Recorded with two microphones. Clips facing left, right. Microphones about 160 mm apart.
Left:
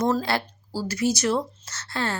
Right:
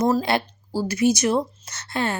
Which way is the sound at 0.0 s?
15° right (ahead or behind).